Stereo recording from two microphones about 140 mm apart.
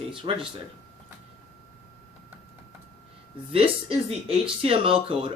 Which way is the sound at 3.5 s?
40° right (ahead or behind).